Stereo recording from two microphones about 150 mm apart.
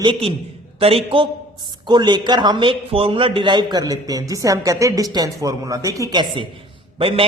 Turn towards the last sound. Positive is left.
turn(degrees=-40)  # may be behind; listen again after turning